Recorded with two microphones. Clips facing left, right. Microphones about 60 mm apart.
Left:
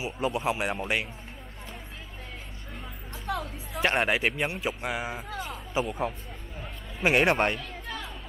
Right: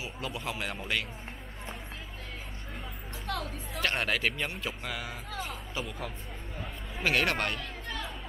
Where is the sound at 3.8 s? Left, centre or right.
Left.